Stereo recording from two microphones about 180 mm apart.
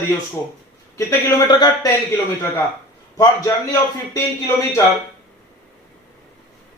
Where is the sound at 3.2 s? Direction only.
15° left (ahead or behind).